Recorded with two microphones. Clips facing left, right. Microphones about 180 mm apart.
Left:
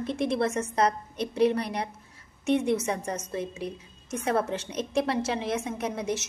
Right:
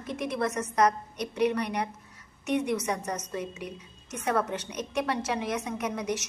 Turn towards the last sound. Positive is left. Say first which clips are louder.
# left 1 dB
turn(degrees=30)  # may be behind; listen again after turning